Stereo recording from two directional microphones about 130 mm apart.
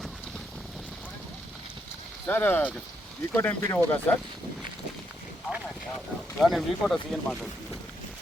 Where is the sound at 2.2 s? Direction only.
15° left (ahead or behind).